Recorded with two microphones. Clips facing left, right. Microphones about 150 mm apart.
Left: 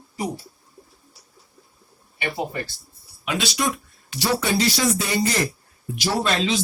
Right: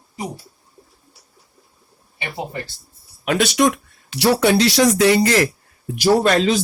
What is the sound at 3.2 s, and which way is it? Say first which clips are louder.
Speech: right 8 dB; 55° right (ahead or behind).